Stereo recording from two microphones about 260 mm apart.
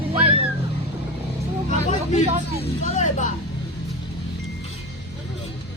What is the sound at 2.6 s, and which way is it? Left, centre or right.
Speech, left.